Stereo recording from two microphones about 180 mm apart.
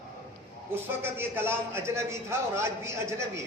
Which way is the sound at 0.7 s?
10° right (ahead or behind).